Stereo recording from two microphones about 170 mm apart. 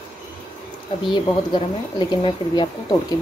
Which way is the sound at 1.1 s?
25° left (ahead or behind).